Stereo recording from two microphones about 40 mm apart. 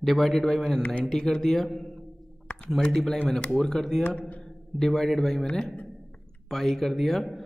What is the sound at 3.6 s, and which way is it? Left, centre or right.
Speech, centre.